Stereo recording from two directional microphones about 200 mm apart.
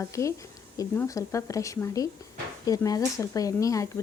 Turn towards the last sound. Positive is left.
turn(degrees=15)  # may be behind; listen again after turning